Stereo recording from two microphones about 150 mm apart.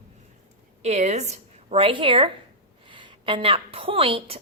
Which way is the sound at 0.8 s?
50° right (ahead or behind).